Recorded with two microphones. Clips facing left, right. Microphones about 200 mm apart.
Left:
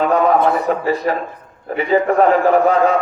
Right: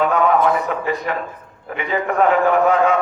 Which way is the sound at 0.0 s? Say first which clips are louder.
Left 2 dB; 35° left (ahead or behind).